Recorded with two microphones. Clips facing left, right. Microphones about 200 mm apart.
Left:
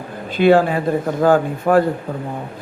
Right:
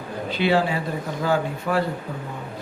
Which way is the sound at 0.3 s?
50° left (ahead or behind).